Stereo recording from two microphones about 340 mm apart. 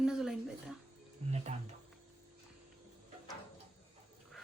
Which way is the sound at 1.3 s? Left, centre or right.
Centre.